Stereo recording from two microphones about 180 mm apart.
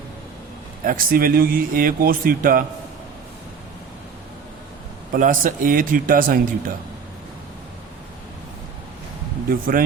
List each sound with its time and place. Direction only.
0.9 s a man's voice: 55° right (ahead or behind)
5.1 s a man's voice: 50° right (ahead or behind)
9.5 s a man's voice: 50° right (ahead or behind)